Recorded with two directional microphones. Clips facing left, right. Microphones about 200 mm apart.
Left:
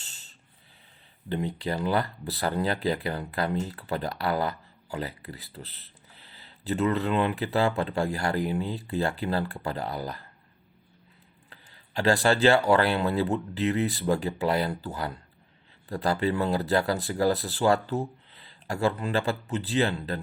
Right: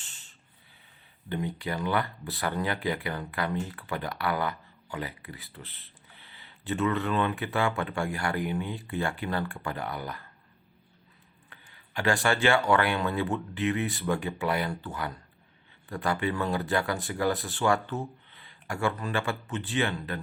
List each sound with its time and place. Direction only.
1.3 s speech: 30° left (ahead or behind)
11.4 s speech: 35° left (ahead or behind)